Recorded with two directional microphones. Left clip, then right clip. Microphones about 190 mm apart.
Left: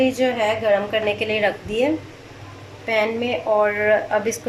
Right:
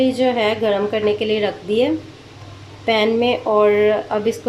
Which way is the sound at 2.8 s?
30° right (ahead or behind).